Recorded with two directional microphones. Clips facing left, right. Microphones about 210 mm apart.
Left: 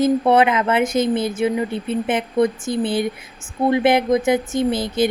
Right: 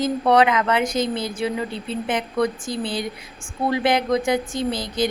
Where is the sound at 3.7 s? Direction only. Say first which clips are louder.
Left 4 dB; 25° left (ahead or behind).